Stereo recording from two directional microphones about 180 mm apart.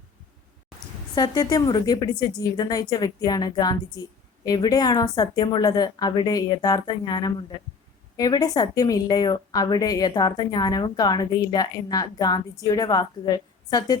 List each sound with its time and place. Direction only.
1.1 s a woman's voice: 20° left (ahead or behind)